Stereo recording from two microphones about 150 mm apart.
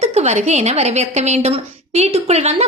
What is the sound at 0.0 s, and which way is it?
A woman's voice, 45° right (ahead or behind).